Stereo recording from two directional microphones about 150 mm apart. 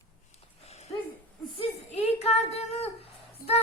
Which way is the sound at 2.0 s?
45° left (ahead or behind).